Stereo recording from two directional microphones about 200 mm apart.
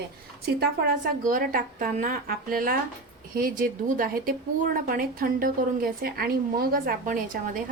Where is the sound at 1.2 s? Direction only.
45° right (ahead or behind).